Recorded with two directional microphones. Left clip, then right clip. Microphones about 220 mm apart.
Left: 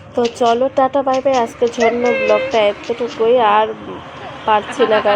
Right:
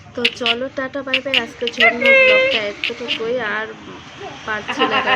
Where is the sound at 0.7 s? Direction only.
65° left (ahead or behind).